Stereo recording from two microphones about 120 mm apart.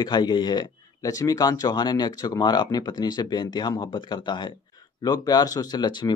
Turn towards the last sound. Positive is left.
turn(degrees=35)  # may be behind; listen again after turning